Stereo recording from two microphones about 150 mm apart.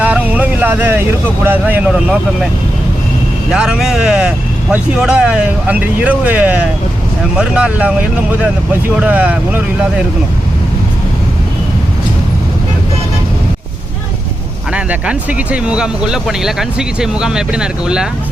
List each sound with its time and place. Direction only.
0.0 s vehicle: 10° right (ahead or behind)
1.5 s speech: 10° right (ahead or behind)
3.5 s speech: 5° right (ahead or behind)
14.7 s speech: 10° right (ahead or behind)